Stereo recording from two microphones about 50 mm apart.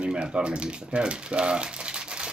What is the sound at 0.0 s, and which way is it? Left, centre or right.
Speech, centre.